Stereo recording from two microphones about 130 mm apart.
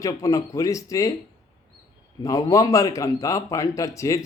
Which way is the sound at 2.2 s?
25° left (ahead or behind).